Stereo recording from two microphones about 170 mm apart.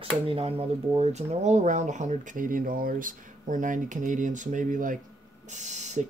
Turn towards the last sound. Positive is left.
turn(degrees=-45)  # may be behind; listen again after turning